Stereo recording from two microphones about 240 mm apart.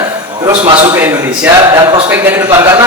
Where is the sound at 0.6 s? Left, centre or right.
Right.